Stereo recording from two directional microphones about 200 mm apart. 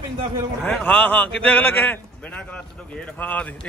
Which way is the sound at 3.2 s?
10° left (ahead or behind).